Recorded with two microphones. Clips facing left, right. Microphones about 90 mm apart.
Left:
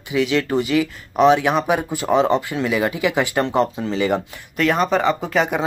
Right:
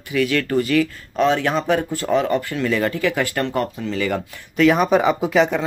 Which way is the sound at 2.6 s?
10° left (ahead or behind).